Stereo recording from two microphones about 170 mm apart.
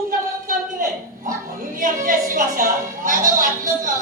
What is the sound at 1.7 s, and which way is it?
A woman's voice, 50° right (ahead or behind).